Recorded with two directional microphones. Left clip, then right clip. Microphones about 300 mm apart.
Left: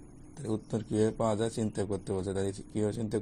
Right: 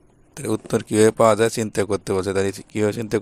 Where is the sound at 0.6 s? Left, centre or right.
Right.